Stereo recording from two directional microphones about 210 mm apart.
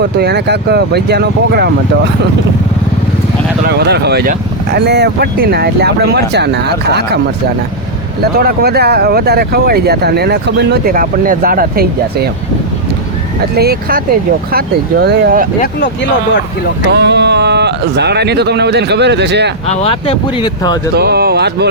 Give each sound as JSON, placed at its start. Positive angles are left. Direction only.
{"t": 0.0, "sound": "speech", "side_deg": -50}
{"t": 3.7, "sound": "speech", "side_deg": -50}
{"t": 8.2, "sound": "speech", "side_deg": -45}
{"t": 13.6, "sound": "speech", "side_deg": -45}
{"t": 16.9, "sound": "speech", "side_deg": -55}
{"t": 19.7, "sound": "speech", "side_deg": 25}
{"t": 20.9, "sound": "speech", "side_deg": -50}